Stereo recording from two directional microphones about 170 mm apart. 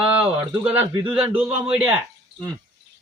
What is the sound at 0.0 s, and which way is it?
Speech, 10° right (ahead or behind).